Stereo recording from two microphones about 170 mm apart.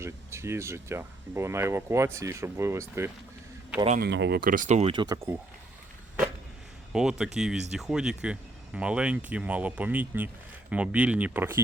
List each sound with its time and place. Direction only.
0.0 s speech: 15° right (ahead or behind)
4.0 s speech: 80° right; by 4.9 s 40° right (ahead or behind)
4.9 s speech: 20° right (ahead or behind)
6.9 s speech: 5° right (ahead or behind)